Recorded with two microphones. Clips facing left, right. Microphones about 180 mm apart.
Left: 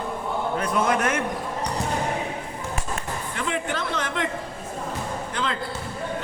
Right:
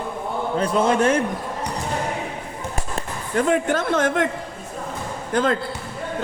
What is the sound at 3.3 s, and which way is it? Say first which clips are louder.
Speech: right 10 dB; 45° right (ahead or behind).